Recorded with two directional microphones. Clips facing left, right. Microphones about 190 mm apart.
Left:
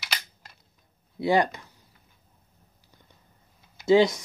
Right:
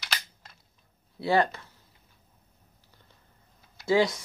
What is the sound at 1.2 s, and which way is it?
Speech, 15° left (ahead or behind).